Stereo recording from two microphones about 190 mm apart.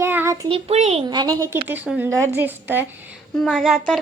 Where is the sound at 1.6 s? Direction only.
10° right (ahead or behind).